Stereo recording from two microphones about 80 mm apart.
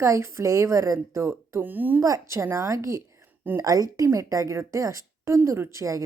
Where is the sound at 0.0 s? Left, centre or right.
Right.